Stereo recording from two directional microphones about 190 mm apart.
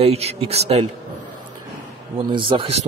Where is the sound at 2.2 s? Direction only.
25° right (ahead or behind).